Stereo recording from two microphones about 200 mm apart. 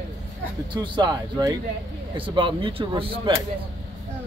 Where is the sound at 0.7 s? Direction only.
20° right (ahead or behind).